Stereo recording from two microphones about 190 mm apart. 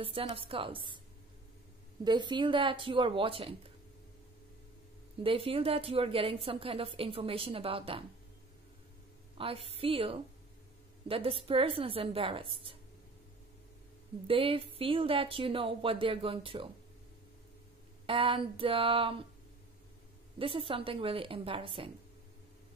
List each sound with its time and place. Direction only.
0.0 s a woman's voice: 30° right (ahead or behind)
2.0 s a woman's voice: 25° right (ahead or behind)
5.2 s a woman's voice: 30° right (ahead or behind)
9.4 s a woman's voice: 30° right (ahead or behind)
14.2 s a woman's voice: 30° right (ahead or behind)
18.0 s a woman's voice: 30° right (ahead or behind)
20.3 s a woman's voice: 30° right (ahead or behind)